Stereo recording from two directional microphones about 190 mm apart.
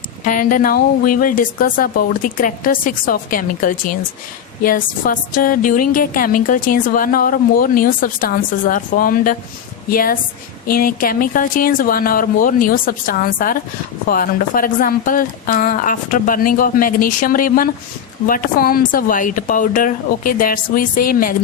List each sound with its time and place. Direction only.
0.3 s a woman's voice: 45° left (ahead or behind)